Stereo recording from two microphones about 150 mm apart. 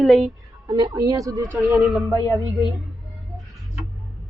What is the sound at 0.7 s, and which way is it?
Speech, 25° right (ahead or behind).